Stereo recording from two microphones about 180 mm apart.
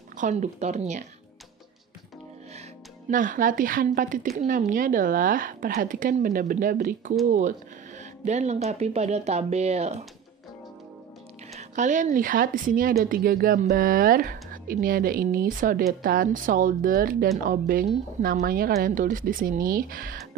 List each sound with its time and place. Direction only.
0.2 s speech: 40° right (ahead or behind)
3.1 s speech: 50° right (ahead or behind)
11.5 s speech: 45° right (ahead or behind)